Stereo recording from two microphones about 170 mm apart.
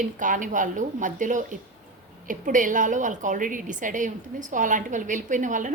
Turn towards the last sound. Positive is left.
turn(degrees=-50)  # may be behind; listen again after turning